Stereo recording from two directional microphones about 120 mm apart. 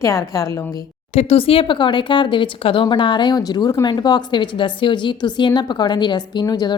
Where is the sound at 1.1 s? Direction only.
60° left (ahead or behind).